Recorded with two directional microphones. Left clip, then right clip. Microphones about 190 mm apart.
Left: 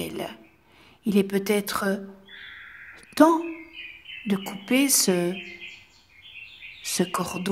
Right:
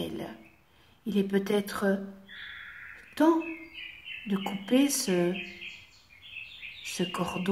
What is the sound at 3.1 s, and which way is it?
Speech, 40° left (ahead or behind).